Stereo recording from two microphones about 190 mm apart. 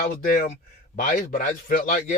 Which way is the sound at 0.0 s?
50° left (ahead or behind).